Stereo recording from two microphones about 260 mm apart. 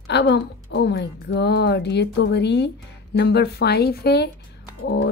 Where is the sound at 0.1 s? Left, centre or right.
Left.